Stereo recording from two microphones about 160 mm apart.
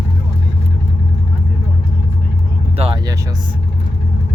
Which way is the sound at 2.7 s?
40° right (ahead or behind).